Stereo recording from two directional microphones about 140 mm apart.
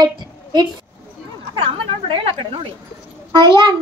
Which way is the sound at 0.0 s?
30° right (ahead or behind).